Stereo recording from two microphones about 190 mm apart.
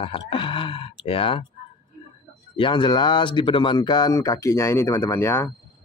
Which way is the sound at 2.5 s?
25° left (ahead or behind).